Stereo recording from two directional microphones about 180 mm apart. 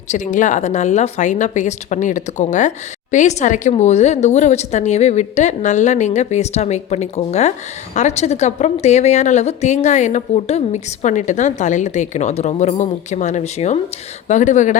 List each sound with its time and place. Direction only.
0.1 s a woman's voice: 45° left (ahead or behind)